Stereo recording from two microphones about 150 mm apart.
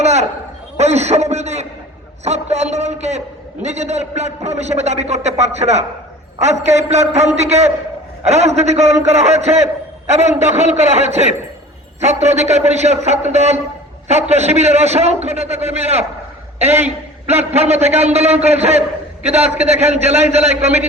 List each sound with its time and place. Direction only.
0.0 s a sound: 45° right (ahead or behind)
0.8 s a man's voice: 45° right (ahead or behind)
17.5 s a man's voice: 45° right (ahead or behind)